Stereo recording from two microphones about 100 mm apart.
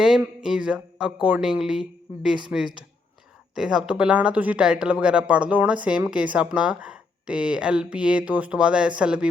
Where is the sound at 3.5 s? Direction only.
5° right (ahead or behind).